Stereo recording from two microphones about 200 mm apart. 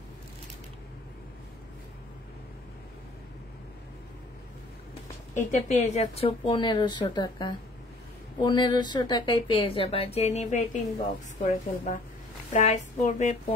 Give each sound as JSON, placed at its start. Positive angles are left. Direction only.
{"t": 5.3, "sound": "a woman's voice", "side_deg": 35}